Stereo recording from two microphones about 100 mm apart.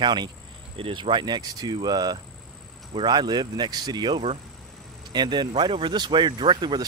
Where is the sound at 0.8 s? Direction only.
65° right (ahead or behind).